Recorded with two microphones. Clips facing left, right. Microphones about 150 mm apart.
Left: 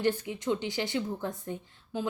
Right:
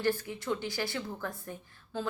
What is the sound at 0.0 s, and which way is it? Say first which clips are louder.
A woman's voice: left 2 dB; 20° left (ahead or behind).